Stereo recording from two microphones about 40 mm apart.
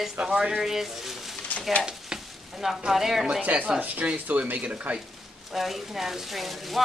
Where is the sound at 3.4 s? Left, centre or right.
Right.